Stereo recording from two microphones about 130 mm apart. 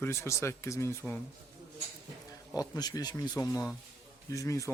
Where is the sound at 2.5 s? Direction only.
30° left (ahead or behind).